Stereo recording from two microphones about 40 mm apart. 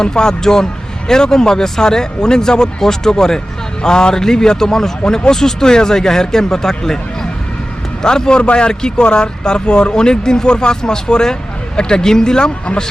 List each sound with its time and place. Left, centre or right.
0.0 s a man's voice: centre